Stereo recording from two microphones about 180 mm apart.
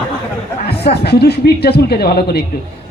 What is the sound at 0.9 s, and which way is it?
Speech, 60° left (ahead or behind).